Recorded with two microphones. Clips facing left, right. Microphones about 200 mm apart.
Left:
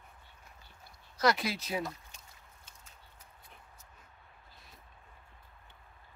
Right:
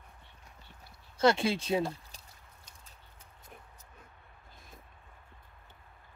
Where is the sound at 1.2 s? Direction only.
30° right (ahead or behind).